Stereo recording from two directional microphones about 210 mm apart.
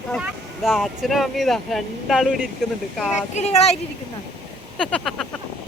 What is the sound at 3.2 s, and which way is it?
Speech, 35° left (ahead or behind).